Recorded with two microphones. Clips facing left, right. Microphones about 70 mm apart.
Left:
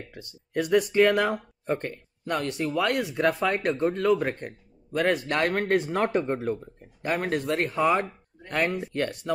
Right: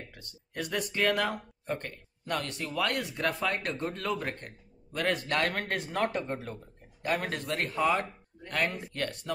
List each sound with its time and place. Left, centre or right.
0.1 s speech: centre